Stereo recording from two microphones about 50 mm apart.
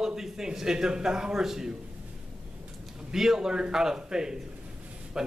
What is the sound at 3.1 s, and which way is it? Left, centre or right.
A man's voice, centre.